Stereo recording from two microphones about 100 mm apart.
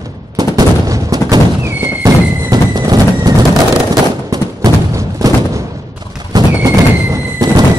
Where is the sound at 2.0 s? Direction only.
40° right (ahead or behind).